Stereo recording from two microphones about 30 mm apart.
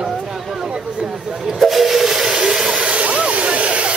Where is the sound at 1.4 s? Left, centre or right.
Centre.